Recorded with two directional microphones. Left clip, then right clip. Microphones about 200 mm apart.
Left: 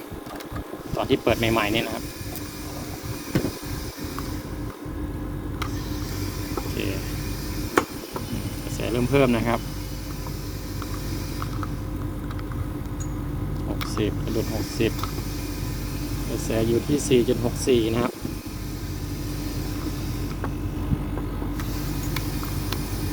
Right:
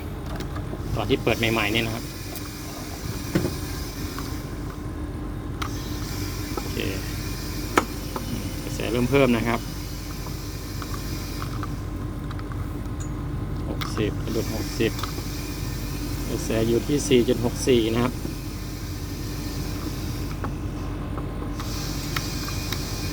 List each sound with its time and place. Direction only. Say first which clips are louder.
0.9 s speech: left 1 dB; 25° left (ahead or behind)
8.8 s speech: right 1 dB; 5° left (ahead or behind)
13.9 s vehicle: left 1 dB; 15° left (ahead or behind)
14.8 s speech: even; 10° left (ahead or behind)
16.5 s speech: even; 5° left (ahead or behind)